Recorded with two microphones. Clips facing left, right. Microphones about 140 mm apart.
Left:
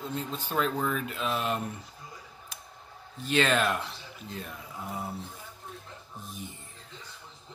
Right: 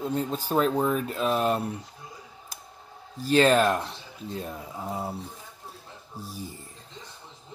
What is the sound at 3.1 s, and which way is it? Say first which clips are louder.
Speech: right 6 dB; 35° right (ahead or behind).